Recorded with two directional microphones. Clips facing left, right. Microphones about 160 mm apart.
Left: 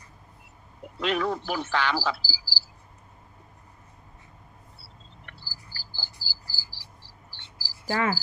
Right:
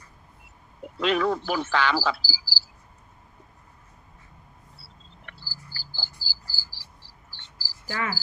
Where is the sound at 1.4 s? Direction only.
90° right.